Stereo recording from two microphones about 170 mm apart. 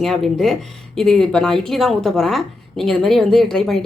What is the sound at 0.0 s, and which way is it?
A woman's voice, centre (ahead or behind).